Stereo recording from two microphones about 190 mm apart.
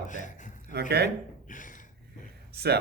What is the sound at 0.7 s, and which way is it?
Speech, 60° right (ahead or behind).